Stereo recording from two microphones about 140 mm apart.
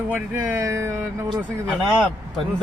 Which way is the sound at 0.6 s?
20° right (ahead or behind).